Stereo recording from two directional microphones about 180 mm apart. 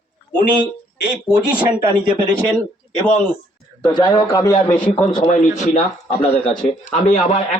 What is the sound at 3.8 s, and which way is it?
A man's voice, 25° left (ahead or behind).